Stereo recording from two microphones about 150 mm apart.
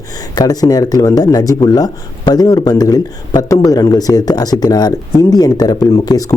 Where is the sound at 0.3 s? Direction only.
25° left (ahead or behind).